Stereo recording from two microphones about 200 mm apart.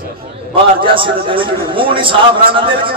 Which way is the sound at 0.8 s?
25° right (ahead or behind).